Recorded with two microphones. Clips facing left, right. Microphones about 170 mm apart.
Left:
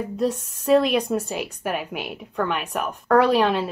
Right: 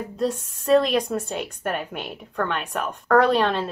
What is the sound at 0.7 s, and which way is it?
A woman's voice, centre (ahead or behind).